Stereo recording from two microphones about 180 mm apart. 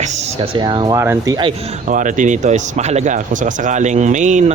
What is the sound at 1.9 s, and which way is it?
Speech, 45° right (ahead or behind).